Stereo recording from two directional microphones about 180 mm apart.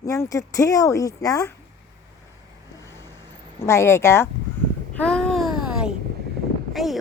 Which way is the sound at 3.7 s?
15° left (ahead or behind).